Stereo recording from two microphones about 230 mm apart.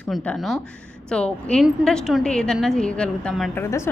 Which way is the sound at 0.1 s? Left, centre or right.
Centre.